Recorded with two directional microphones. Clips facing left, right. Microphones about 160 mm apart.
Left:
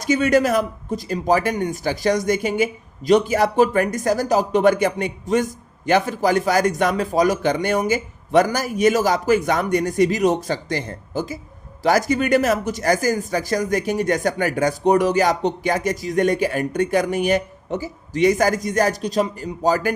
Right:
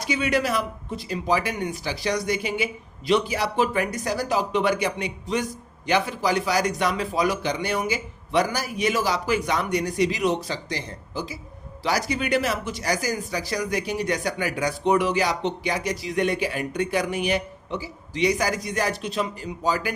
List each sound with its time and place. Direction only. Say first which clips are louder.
0.0 s speech: left 7 dB; 45° left (ahead or behind)